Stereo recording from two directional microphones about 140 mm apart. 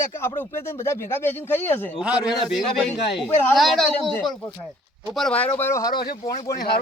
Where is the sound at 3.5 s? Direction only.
Centre (ahead or behind); by 6.6 s 25° left (ahead or behind).